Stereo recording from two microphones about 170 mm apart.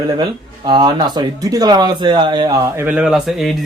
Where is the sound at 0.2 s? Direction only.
25° right (ahead or behind).